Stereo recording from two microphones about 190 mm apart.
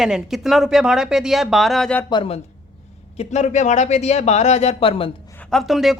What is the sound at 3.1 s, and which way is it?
Speech, 35° left (ahead or behind).